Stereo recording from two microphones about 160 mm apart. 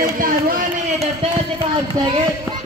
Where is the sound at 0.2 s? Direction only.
60° right (ahead or behind).